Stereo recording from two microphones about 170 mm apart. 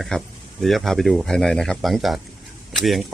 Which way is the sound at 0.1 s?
5° left (ahead or behind).